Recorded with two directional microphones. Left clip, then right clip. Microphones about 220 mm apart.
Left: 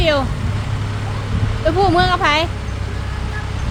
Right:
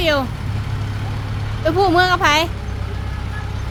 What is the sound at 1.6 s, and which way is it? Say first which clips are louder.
Speech: even; 15° right (ahead or behind).